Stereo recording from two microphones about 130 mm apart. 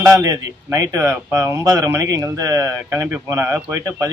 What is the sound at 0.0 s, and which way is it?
Speech, 25° right (ahead or behind).